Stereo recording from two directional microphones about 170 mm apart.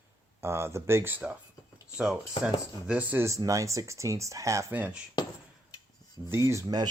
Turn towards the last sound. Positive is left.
turn(degrees=-20)  # may be behind; listen again after turning